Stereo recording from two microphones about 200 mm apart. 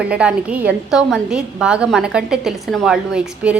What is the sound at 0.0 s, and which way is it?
A woman's voice, 5° right (ahead or behind).